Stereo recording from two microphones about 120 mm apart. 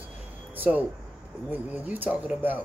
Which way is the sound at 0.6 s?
15° right (ahead or behind).